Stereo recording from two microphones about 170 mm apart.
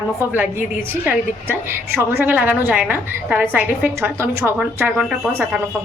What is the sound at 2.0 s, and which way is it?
A woman's voice, 10° right (ahead or behind).